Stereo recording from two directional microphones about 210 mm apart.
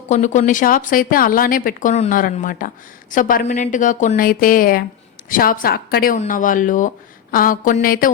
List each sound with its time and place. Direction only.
0.1 s a woman's voice: 35° left (ahead or behind)